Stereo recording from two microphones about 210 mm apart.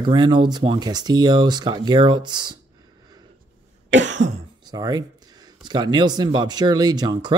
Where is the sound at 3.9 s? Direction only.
60° right (ahead or behind).